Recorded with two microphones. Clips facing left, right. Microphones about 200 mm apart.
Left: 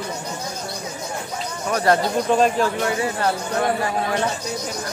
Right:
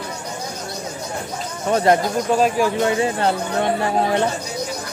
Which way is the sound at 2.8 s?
25° right (ahead or behind).